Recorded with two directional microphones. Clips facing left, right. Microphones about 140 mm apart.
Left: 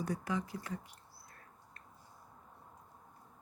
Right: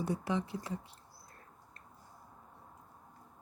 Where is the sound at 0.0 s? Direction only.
25° right (ahead or behind).